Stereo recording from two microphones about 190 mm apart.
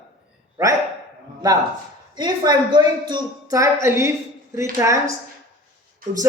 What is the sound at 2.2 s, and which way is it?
A woman's voice, 20° right (ahead or behind).